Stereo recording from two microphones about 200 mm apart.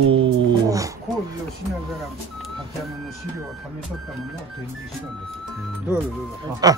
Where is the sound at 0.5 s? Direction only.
15° right (ahead or behind).